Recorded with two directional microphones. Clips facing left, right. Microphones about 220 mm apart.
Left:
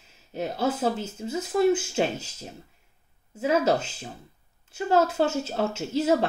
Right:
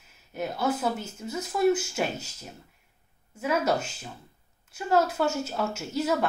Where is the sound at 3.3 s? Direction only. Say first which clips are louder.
Left 4 dB; 25° left (ahead or behind).